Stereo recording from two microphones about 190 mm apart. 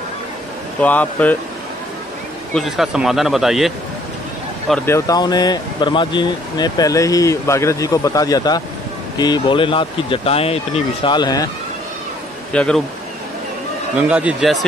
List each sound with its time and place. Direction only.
0.7 s speech: 10° left (ahead or behind)
2.5 s speech: centre (ahead or behind)
4.6 s speech: 10° left (ahead or behind)
12.5 s speech: 5° left (ahead or behind)
13.9 s speech: 5° right (ahead or behind)